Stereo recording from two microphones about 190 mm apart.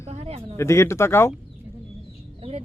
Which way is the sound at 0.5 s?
15° left (ahead or behind).